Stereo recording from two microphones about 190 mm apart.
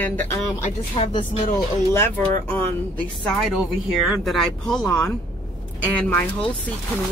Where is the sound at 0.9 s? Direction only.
30° left (ahead or behind).